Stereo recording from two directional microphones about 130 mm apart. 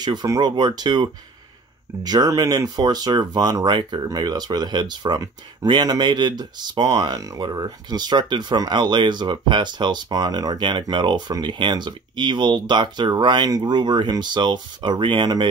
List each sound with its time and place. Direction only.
0.0 s speech: 35° right (ahead or behind)